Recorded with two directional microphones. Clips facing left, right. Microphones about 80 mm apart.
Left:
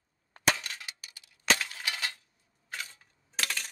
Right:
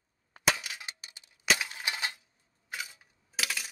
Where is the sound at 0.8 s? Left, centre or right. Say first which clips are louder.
Right 1 dB; right.